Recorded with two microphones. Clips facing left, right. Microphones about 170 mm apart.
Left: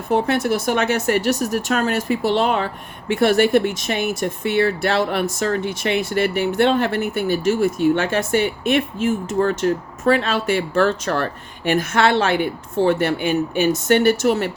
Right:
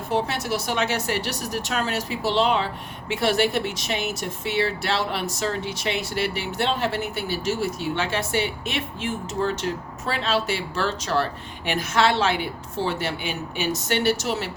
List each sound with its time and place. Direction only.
0.1 s speech: 55° left (ahead or behind)